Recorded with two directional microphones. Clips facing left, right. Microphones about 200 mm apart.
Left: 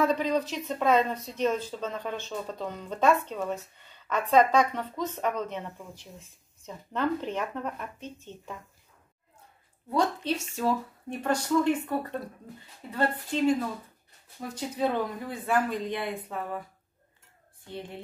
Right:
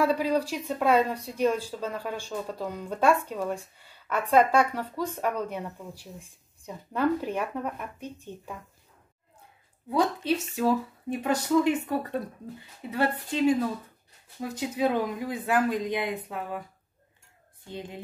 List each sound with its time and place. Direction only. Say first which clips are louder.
0.0 s speech: right 1 dB; 10° right (ahead or behind)
9.8 s a woman's voice: right 2 dB; 5° right (ahead or behind)
14.4 s speech: right 2 dB; 10° right (ahead or behind)
17.6 s speech: right 1 dB; 15° right (ahead or behind)